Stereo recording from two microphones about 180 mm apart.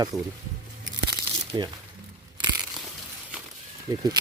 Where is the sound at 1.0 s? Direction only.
25° right (ahead or behind).